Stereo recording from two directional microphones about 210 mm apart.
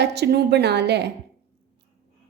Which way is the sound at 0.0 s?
55° right (ahead or behind).